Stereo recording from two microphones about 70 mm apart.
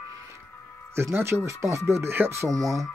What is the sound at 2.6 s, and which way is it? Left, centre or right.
Speech, centre.